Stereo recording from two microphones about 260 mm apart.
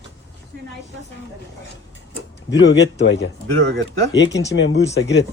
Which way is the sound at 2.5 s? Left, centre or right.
Left.